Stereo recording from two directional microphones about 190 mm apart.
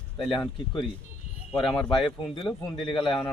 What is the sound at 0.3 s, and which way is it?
Speech, 25° left (ahead or behind).